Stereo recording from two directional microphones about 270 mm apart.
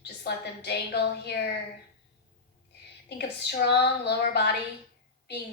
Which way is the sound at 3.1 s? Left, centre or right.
Left.